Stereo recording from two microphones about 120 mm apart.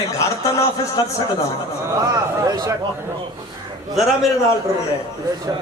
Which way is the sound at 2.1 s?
30° right (ahead or behind).